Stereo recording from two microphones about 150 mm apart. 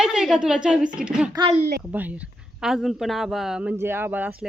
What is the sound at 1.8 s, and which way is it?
Speech, 10° right (ahead or behind).